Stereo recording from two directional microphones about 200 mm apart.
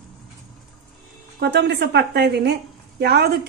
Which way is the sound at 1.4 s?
55° right (ahead or behind).